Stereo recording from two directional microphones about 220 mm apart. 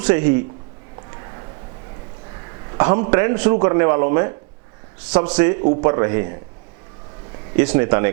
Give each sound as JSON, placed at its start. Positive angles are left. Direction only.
{"t": 0.0, "sound": "speech", "side_deg": -10}
{"t": 2.7, "sound": "speech", "side_deg": -15}
{"t": 7.5, "sound": "speech", "side_deg": -10}